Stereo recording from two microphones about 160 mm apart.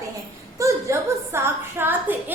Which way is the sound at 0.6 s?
15° right (ahead or behind).